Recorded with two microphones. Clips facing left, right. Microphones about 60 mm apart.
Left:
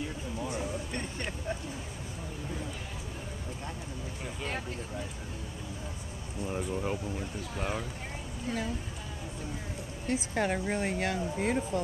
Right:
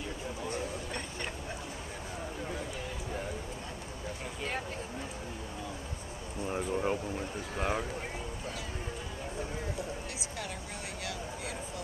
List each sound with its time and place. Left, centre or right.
6.4 s speech: centre
7.5 s speech: right
10.0 s speech: left